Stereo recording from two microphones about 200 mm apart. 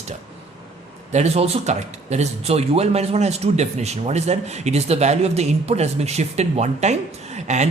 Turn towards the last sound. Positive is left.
turn(degrees=-35)  # may be behind; listen again after turning